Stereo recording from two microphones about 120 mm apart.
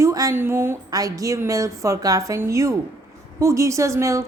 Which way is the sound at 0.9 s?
30° right (ahead or behind).